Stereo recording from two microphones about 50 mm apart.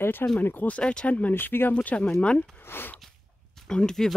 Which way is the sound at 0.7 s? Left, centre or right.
Centre.